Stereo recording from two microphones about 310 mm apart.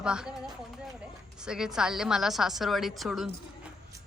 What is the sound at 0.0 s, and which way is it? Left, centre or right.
Speech, centre.